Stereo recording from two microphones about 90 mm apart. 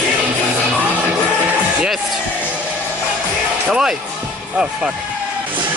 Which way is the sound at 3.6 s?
5° right (ahead or behind).